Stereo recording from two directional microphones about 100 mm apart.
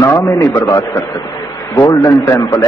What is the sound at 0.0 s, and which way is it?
Speech, 30° left (ahead or behind).